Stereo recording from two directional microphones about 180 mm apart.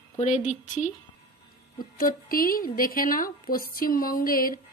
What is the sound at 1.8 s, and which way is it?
Speech, 55° left (ahead or behind).